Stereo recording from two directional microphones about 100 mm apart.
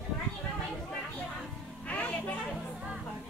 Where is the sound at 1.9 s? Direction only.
15° left (ahead or behind).